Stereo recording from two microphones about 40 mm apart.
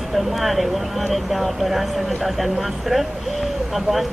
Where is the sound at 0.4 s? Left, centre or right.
Centre.